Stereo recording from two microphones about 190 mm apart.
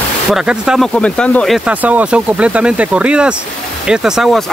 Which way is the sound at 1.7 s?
10° right (ahead or behind).